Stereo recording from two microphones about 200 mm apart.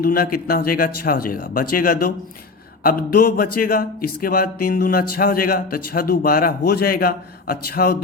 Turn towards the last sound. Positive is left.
turn(degrees=50)  # may be behind; listen again after turning